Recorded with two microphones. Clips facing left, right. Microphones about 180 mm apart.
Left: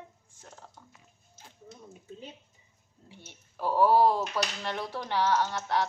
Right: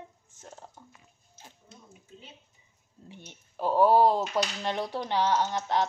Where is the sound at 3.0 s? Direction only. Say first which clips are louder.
Right 3 dB; 20° right (ahead or behind).